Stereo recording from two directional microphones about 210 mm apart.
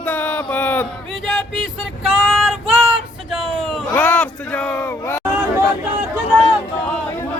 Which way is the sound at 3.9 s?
10° left (ahead or behind).